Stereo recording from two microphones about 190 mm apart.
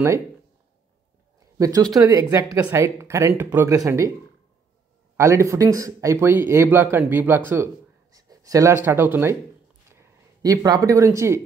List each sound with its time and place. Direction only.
1.6 s speech: 20° right (ahead or behind)
5.1 s speech: 15° right (ahead or behind)